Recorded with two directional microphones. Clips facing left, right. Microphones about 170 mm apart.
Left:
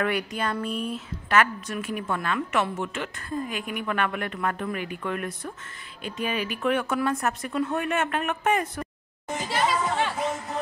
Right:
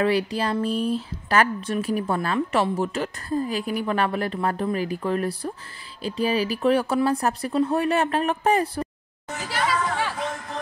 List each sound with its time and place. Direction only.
0.0 s speech: 30° right (ahead or behind)
9.4 s chatter: 25° left (ahead or behind)
10.1 s music: 5° left (ahead or behind)